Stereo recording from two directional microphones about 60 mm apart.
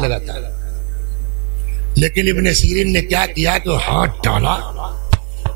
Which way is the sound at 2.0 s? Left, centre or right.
Right.